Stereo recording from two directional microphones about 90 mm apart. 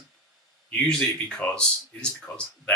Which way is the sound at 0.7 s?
15° left (ahead or behind).